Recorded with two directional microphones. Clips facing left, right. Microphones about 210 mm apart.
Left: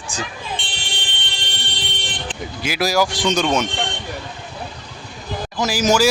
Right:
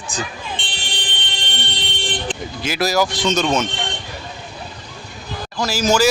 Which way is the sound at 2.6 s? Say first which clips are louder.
Even; 10° left (ahead or behind).